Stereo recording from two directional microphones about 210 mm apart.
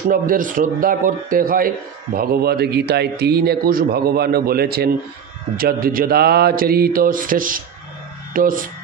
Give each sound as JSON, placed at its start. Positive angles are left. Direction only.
{"t": 0.1, "sound": "a man's voice", "side_deg": -40}